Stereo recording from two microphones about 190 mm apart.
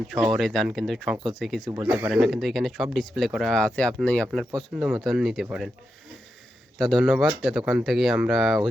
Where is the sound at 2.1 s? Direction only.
Centre (ahead or behind).